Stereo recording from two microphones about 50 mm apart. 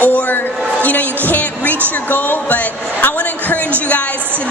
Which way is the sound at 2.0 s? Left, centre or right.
Left.